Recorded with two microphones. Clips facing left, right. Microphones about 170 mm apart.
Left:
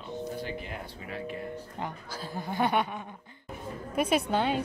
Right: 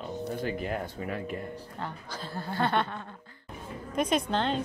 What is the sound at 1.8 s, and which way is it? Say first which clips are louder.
A woman's voice: right 1 dB; 10° left (ahead or behind).